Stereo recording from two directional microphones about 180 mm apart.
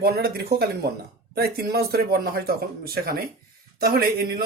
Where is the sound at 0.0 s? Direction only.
60° right (ahead or behind).